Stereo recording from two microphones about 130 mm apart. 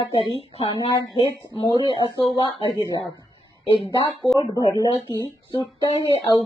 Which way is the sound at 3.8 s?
40° left (ahead or behind).